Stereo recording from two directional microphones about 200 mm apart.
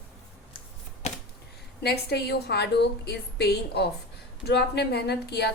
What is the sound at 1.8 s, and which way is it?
A woman's voice, 55° left (ahead or behind).